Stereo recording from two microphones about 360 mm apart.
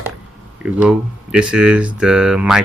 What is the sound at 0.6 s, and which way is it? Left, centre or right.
Speech, centre.